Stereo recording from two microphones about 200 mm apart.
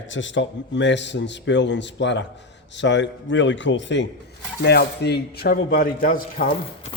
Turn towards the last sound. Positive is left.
turn(degrees=45)  # may be behind; listen again after turning